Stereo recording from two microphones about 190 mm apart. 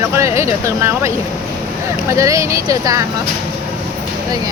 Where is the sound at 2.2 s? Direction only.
15° right (ahead or behind).